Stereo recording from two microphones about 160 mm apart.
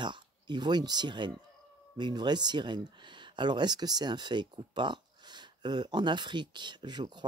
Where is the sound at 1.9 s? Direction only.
25° right (ahead or behind).